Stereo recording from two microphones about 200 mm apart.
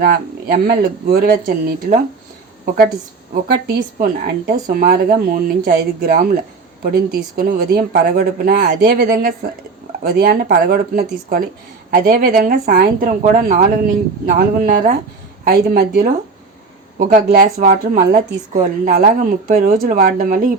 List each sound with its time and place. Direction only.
0.0 s speech: 50° right (ahead or behind)
3.5 s speech: 45° right (ahead or behind)